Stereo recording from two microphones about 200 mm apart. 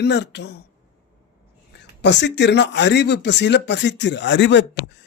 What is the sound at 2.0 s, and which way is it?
Speech, 60° left (ahead or behind).